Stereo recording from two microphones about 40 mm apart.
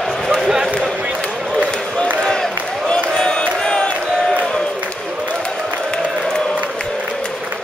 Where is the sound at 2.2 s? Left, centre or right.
Centre.